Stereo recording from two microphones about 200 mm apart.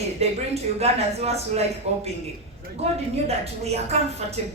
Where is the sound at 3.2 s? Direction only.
30° right (ahead or behind).